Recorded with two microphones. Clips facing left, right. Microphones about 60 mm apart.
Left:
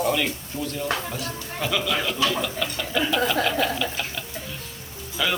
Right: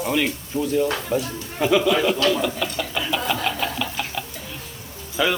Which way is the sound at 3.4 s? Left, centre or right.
Centre.